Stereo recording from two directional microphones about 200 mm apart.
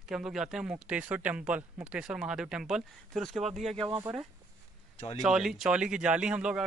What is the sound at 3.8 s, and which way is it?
Speech, 20° right (ahead or behind).